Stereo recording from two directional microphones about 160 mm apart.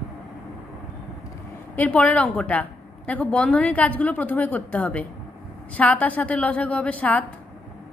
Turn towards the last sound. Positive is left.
turn(degrees=10)  # may be behind; listen again after turning